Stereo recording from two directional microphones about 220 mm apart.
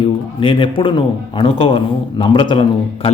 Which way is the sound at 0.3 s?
25° left (ahead or behind).